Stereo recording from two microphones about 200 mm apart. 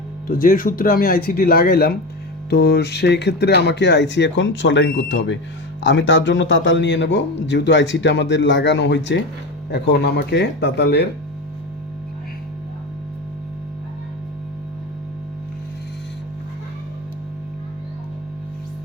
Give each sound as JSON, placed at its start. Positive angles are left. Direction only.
{"t": 0.3, "sound": "a man's voice", "side_deg": 45}